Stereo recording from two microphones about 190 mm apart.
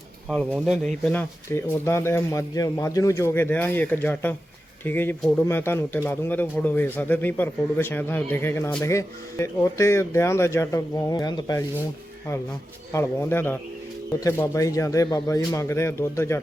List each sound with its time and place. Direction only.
0.6 s speech: 5° left (ahead or behind); by 11.6 s 20° left (ahead or behind)
12.9 s speech: 15° left (ahead or behind)